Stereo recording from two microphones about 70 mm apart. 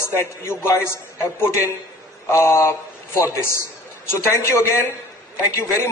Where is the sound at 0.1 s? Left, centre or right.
Left.